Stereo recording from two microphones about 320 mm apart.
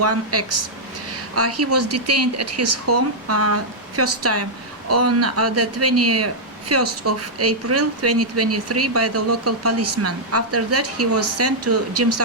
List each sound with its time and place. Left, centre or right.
0.0 s speech: right